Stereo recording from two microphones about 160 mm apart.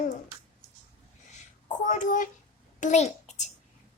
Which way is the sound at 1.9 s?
55° left (ahead or behind).